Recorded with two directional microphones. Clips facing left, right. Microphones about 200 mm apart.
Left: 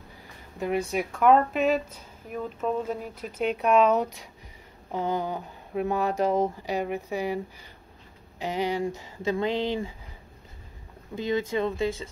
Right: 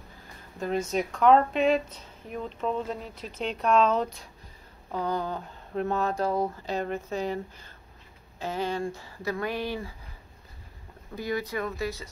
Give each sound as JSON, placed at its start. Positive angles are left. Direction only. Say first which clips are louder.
{"t": 0.6, "sound": "a woman's voice", "louder": "left 1 dB", "side_deg": 15}
{"t": 11.1, "sound": "speech", "louder": "left 4 dB", "side_deg": 25}